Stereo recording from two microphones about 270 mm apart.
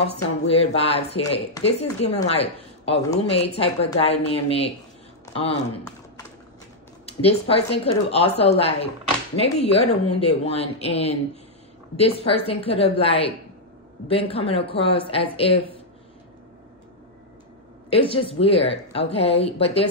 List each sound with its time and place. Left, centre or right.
0.1 s speech: left
5.2 s a sound: centre
7.1 s speech: left
12.2 s speech: left
17.8 s speech: centre